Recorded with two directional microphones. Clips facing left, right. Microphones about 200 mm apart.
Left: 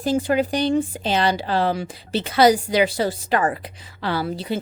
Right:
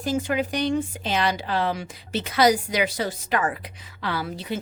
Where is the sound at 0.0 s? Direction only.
35° left (ahead or behind).